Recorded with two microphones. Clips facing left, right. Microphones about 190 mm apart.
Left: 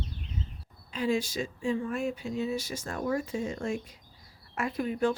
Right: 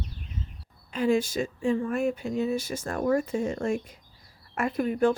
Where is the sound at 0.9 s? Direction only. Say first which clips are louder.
Right 5 dB; 50° right (ahead or behind).